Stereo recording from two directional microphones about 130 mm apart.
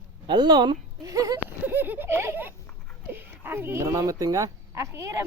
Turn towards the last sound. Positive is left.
turn(degrees=-20)  # may be behind; listen again after turning